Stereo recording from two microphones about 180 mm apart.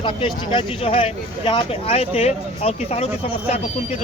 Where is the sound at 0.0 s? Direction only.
30° left (ahead or behind).